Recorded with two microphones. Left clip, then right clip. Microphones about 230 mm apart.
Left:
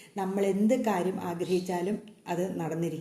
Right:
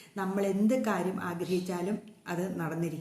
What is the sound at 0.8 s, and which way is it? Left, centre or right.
Speech, right.